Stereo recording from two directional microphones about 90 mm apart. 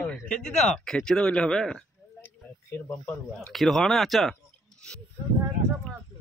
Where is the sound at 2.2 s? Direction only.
25° left (ahead or behind).